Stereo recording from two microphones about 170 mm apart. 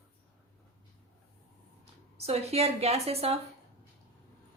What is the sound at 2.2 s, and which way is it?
A woman's voice, 35° right (ahead or behind).